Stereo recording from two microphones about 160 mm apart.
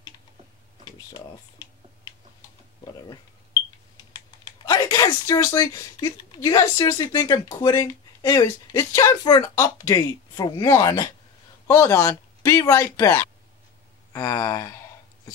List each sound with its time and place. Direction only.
4.6 s speech: 25° left (ahead or behind)